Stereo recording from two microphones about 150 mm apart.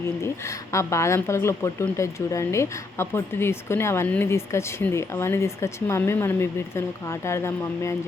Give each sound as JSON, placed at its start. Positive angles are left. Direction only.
{"t": 0.2, "sound": "speech", "side_deg": 20}